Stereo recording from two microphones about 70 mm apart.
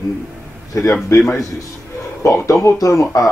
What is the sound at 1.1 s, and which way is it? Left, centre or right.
Speech, left.